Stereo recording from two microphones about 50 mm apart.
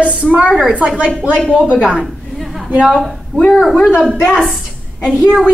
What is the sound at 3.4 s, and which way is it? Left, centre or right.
A woman's voice, centre.